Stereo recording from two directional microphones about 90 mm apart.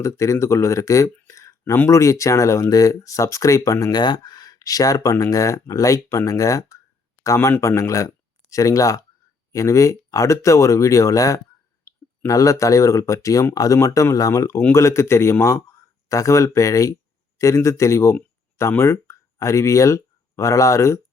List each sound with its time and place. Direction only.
0.0 s speech: 35° left (ahead or behind)
3.9 s speech: 55° left (ahead or behind)
11.9 s clicking: 35° left (ahead or behind)
12.2 s speech: 35° left (ahead or behind)